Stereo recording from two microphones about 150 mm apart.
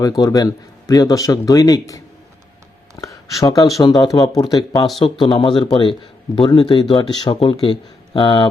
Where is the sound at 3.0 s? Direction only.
20° left (ahead or behind).